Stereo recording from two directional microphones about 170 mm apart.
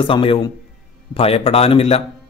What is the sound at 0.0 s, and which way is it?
Speech, 30° left (ahead or behind).